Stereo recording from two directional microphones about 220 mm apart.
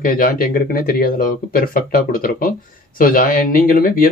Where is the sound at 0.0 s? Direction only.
40° left (ahead or behind).